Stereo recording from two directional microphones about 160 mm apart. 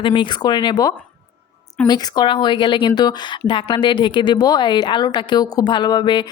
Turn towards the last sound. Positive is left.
turn(degrees=30)  # may be behind; listen again after turning